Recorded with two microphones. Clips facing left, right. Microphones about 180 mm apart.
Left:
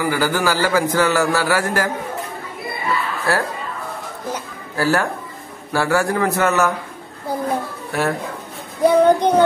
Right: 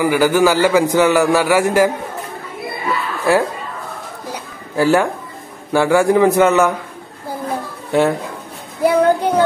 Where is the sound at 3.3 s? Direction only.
15° right (ahead or behind).